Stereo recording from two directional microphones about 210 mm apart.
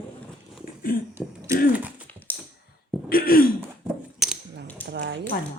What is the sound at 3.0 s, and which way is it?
Throat clearing, 45° left (ahead or behind).